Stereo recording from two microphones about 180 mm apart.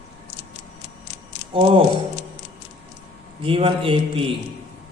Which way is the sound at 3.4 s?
30° right (ahead or behind).